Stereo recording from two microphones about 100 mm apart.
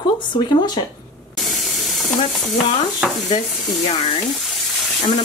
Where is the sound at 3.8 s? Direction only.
80° left.